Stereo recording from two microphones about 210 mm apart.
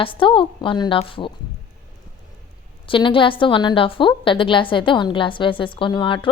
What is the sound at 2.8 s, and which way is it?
A woman's voice, 25° left (ahead or behind).